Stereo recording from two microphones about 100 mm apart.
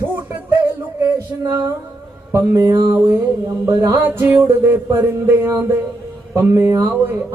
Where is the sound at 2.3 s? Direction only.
30° right (ahead or behind).